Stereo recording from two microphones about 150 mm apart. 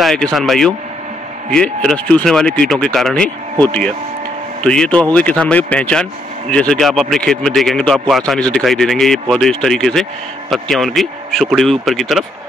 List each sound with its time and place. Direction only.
0.0 s speech: centre (ahead or behind)
4.6 s speech: 5° left (ahead or behind)